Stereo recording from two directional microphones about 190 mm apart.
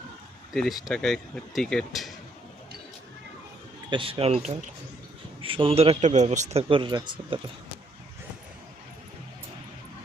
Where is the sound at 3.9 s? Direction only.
25° right (ahead or behind).